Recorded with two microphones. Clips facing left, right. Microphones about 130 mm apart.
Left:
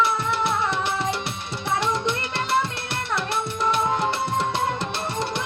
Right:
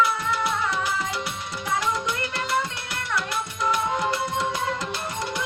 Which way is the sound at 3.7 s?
25° left (ahead or behind).